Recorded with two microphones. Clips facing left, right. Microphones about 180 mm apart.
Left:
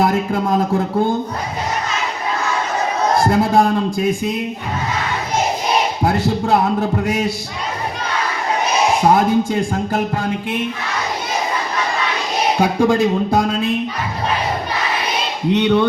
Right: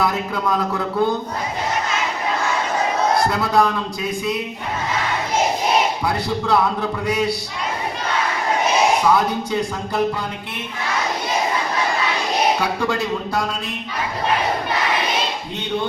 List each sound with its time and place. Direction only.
0.0 s a man's voice: 50° left (ahead or behind)
3.2 s a man's voice: 50° left (ahead or behind)
6.0 s a man's voice: 45° left (ahead or behind)
9.0 s a man's voice: 50° left (ahead or behind)
12.5 s a man's voice: 50° left (ahead or behind)
15.5 s a sound: 70° left (ahead or behind)